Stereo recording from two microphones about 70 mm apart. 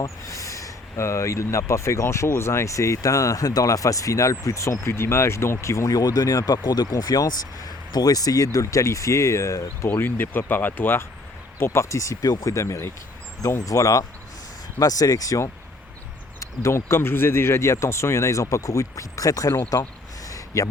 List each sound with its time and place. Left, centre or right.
0.0 s speech: left
6.9 s speech: left
9.9 s speech: left
11.6 s speech: left
16.4 s speech: left
20.2 s a sound: left